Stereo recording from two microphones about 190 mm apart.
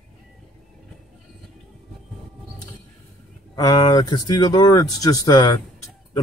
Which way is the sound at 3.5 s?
20° left (ahead or behind).